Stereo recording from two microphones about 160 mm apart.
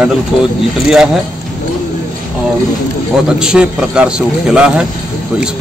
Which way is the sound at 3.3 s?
5° right (ahead or behind).